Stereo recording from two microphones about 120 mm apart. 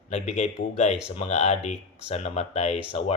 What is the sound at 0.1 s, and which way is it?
Speech, 65° left (ahead or behind).